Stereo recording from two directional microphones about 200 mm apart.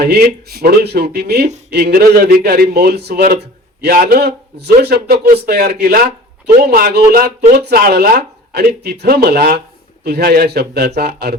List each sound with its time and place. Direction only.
0.0 s a man's voice: 55° right (ahead or behind)